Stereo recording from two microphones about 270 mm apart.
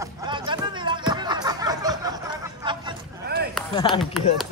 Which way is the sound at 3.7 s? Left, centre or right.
Centre.